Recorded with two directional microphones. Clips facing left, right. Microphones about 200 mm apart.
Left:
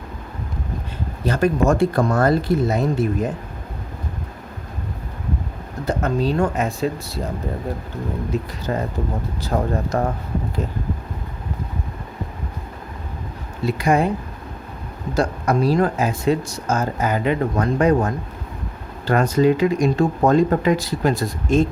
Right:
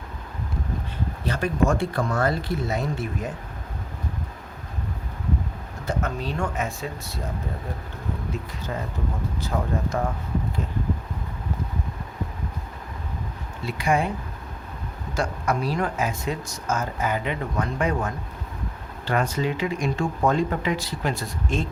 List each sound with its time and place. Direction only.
1.2 s speech: 45° left (ahead or behind)
5.8 s speech: 35° left (ahead or behind)
8.6 s speech: 60° left (ahead or behind)
9.4 s speech: 40° left (ahead or behind)
13.7 s speech: 40° left (ahead or behind)
15.1 s speech: 35° left (ahead or behind)